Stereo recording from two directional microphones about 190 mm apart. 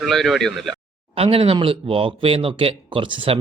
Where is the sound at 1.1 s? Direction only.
30° right (ahead or behind).